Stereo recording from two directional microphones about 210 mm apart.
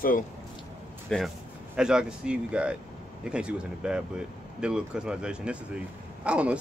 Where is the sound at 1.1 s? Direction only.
Centre (ahead or behind).